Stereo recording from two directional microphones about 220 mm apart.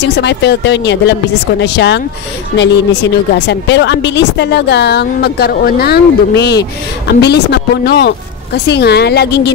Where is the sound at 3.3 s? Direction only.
50° left (ahead or behind).